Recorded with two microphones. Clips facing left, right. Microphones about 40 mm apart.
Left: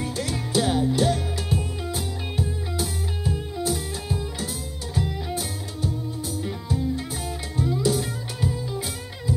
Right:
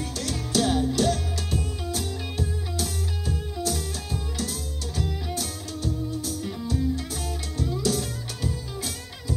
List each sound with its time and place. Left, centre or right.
0.0 s music: left